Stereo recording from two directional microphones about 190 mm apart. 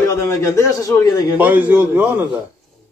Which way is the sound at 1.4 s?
10° right (ahead or behind).